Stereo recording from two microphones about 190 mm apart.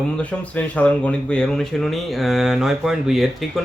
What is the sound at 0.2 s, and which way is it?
Speech, 5° left (ahead or behind).